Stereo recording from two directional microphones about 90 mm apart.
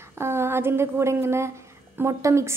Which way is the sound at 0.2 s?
30° right (ahead or behind).